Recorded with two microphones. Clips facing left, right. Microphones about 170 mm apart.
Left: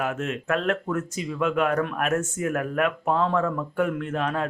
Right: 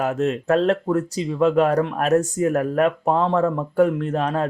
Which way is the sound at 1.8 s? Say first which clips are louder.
Right 4 dB; 25° right (ahead or behind).